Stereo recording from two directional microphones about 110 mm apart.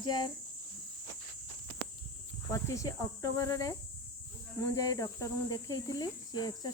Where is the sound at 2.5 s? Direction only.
30° left (ahead or behind).